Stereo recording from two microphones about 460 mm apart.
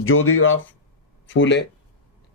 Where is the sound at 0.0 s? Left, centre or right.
Left.